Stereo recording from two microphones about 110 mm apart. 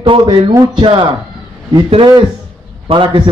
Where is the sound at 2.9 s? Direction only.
50° right (ahead or behind).